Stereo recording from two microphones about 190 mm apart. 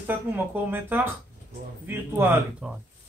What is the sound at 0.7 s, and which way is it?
Speech, 10° right (ahead or behind).